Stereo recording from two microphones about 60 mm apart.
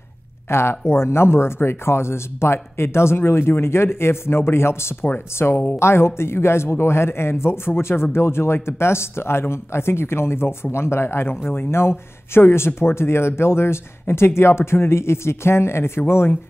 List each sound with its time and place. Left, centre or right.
0.5 s speech: left
5.4 s speech: left
5.8 s speech: left